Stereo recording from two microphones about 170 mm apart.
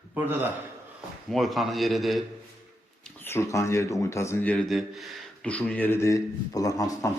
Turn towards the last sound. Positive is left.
turn(degrees=20)  # may be behind; listen again after turning